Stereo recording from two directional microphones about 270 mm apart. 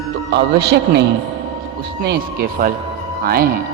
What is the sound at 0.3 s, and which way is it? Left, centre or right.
Speech, right.